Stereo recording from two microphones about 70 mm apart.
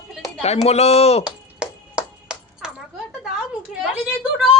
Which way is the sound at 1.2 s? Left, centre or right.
Centre.